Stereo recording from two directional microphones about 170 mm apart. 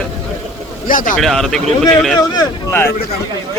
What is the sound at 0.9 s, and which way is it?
Speech, 50° left (ahead or behind).